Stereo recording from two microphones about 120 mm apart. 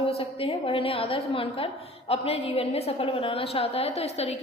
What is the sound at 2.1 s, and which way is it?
A woman's voice, 55° left (ahead or behind).